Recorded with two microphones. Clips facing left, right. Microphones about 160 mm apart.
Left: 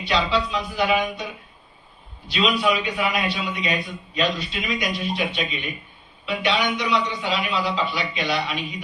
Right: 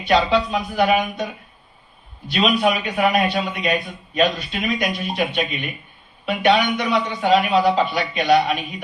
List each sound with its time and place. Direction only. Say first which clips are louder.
0.0 s a man's voice: right 5 dB; 50° right (ahead or behind)